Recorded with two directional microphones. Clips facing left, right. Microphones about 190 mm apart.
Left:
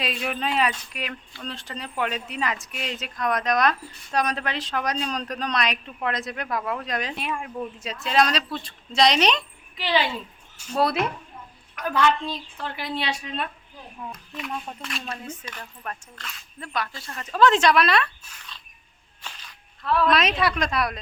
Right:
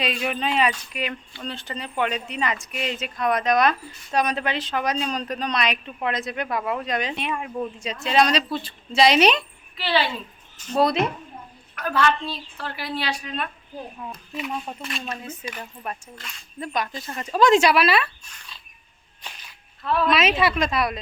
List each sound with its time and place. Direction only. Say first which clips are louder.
0.0 s speech: right 2 dB; centre (ahead or behind)
9.7 s a woman's voice: right 1 dB; 15° left (ahead or behind)
11.7 s a woman's voice: even; 15° left (ahead or behind)
14.3 s speech: right 3 dB; 5° right (ahead or behind)
19.8 s speech: even; centre (ahead or behind)